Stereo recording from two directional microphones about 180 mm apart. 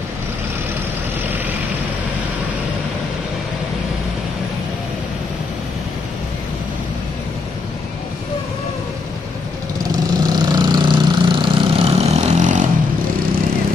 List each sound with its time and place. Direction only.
9.8 s vehicle: 20° right (ahead or behind); by 12.6 s 45° right (ahead or behind)